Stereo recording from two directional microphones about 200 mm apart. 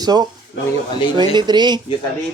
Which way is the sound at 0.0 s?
20° right (ahead or behind).